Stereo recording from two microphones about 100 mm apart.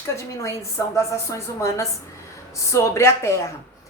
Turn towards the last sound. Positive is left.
turn(degrees=25)  # may be behind; listen again after turning